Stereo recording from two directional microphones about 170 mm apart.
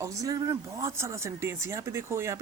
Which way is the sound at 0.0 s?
20° right (ahead or behind).